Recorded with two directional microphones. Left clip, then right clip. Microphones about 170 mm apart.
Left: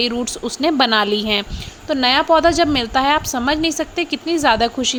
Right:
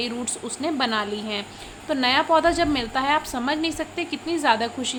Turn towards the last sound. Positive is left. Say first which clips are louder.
# left 6 dB
turn(degrees=35)  # may be behind; listen again after turning